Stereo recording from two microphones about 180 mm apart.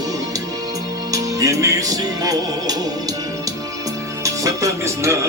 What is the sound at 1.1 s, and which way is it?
Music, 20° right (ahead or behind).